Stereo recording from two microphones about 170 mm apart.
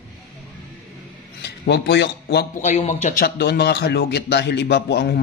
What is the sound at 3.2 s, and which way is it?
A man's voice, 70° left (ahead or behind).